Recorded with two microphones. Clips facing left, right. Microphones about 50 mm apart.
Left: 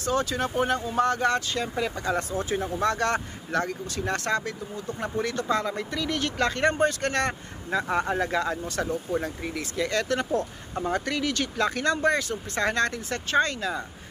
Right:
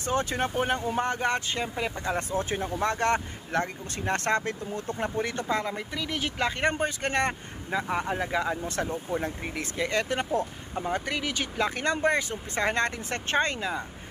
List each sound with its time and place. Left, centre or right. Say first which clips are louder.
0.0 s speech: left 1 dB; right
5.0 s speech: left 3 dB; right
7.9 s speech: left 3 dB; centre
9.2 s speech: left 1 dB; right